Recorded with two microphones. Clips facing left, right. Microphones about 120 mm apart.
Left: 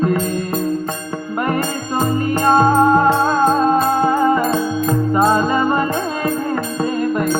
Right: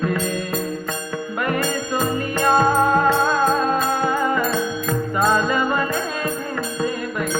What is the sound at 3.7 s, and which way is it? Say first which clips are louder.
Music: left 5 dB; 40° left (ahead or behind).